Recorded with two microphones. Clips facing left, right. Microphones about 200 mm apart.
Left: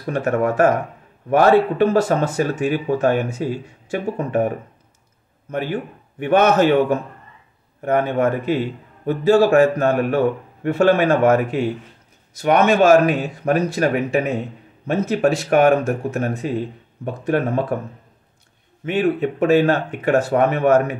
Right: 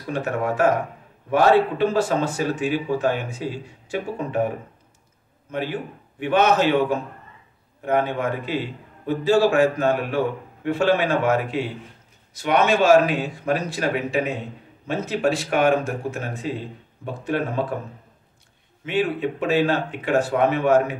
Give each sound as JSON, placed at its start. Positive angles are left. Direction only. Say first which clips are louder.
{"t": 0.0, "sound": "a man's voice", "louder": "left 5 dB", "side_deg": 55}
{"t": 5.5, "sound": "a man's voice", "louder": "left 3 dB", "side_deg": 50}
{"t": 18.9, "sound": "a man's voice", "louder": "left 4 dB", "side_deg": 55}